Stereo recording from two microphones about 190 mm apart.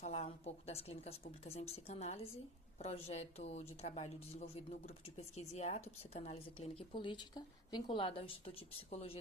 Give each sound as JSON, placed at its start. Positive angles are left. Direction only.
{"t": 0.0, "sound": "a woman's voice", "side_deg": 35}